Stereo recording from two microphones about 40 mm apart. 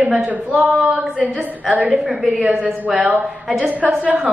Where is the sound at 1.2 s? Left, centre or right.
Right.